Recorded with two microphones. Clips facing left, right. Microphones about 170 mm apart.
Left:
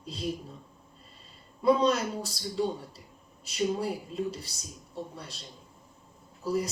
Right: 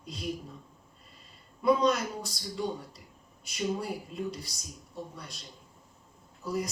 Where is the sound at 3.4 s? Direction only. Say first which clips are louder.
Left 3 dB; 30° left (ahead or behind).